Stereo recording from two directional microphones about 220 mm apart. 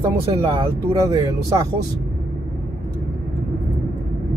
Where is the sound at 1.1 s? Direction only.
15° right (ahead or behind).